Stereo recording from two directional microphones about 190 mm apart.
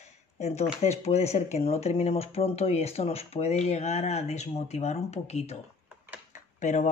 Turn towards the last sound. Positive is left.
turn(degrees=40)  # may be behind; listen again after turning